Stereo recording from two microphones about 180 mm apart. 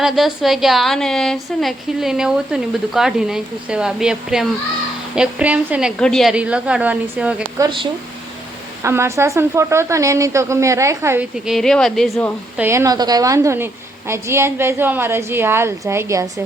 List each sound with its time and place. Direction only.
0.0 s a woman's voice: centre (ahead or behind)
7.6 s speech: 25° right (ahead or behind)
8.8 s a woman's voice: 15° right (ahead or behind)
11.4 s a woman's voice: centre (ahead or behind)
12.6 s a woman's voice: 15° right (ahead or behind)